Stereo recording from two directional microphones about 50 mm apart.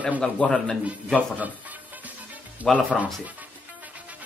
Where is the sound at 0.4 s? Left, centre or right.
Left.